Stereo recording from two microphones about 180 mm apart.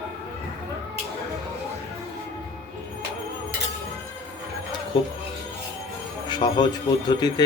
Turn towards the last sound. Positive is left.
turn(degrees=25)  # may be behind; listen again after turning